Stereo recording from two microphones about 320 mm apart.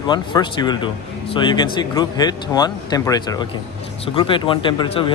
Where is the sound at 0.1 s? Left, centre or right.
Centre.